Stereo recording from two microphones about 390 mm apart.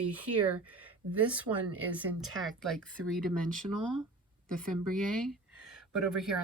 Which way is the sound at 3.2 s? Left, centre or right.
Right.